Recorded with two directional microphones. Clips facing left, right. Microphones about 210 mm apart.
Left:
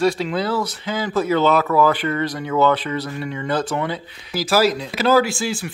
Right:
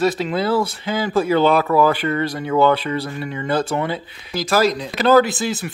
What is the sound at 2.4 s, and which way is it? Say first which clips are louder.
Speech: right 2 dB; 30° right (ahead or behind).